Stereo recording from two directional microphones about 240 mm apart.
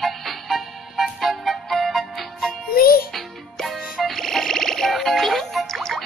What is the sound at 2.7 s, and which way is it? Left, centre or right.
Music, left.